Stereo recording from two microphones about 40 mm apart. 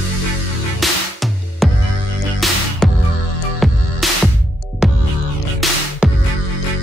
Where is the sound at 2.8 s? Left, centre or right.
Centre.